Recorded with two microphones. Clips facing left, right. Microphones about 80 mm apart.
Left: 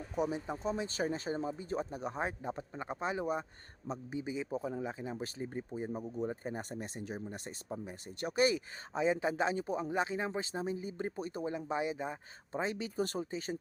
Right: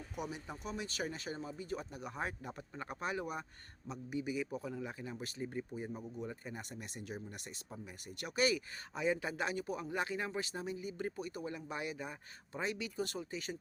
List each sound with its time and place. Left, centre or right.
0.2 s speech: left